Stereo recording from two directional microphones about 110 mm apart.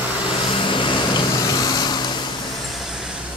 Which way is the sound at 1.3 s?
35° left (ahead or behind).